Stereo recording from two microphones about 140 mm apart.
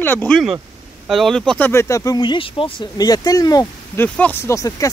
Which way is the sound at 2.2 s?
35° left (ahead or behind).